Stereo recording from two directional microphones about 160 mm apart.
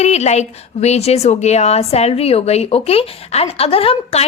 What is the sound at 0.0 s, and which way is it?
A woman's voice, 45° left (ahead or behind).